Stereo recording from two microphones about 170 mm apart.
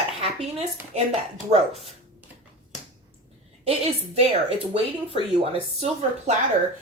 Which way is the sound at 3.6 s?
35° right (ahead or behind).